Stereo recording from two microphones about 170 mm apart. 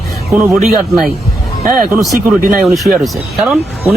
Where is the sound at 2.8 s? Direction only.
Centre (ahead or behind).